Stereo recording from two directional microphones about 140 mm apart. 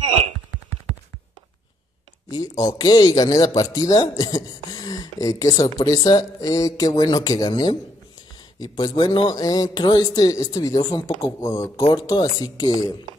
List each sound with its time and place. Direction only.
2.2 s a man's voice: 25° left (ahead or behind)